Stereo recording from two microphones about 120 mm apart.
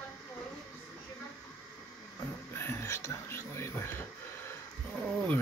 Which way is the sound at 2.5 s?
20° left (ahead or behind).